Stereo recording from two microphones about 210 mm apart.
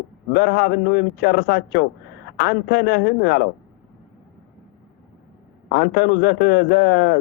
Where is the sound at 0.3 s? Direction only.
55° left (ahead or behind).